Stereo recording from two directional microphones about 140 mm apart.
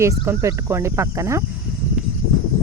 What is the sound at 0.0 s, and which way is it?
Speech, 20° right (ahead or behind).